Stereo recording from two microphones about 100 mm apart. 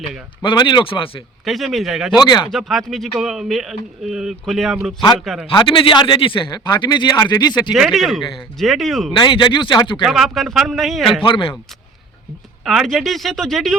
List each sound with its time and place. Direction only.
0.4 s speech: 45° left (ahead or behind); by 1.2 s 65° left (ahead or behind)
1.5 s speech: centre (ahead or behind)
2.1 s speech: 45° left (ahead or behind)
2.5 s speech: centre (ahead or behind)
5.5 s speech: 55° left (ahead or behind)
7.7 s speech: centre (ahead or behind)
9.1 s speech: 50° left (ahead or behind)
10.0 s speech: 5° right (ahead or behind)
11.2 s speech: 65° left (ahead or behind)
12.6 s speech: centre (ahead or behind)